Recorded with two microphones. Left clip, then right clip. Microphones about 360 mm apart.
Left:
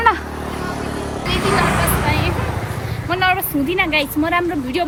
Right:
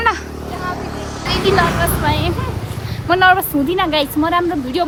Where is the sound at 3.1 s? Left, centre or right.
Centre.